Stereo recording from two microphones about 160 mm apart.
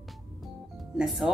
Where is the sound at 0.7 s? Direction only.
Centre (ahead or behind).